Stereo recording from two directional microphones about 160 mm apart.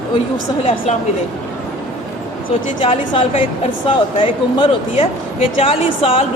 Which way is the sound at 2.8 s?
35° left (ahead or behind).